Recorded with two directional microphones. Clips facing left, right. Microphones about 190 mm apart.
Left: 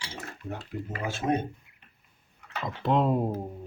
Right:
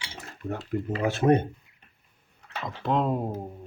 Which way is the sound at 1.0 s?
65° right (ahead or behind).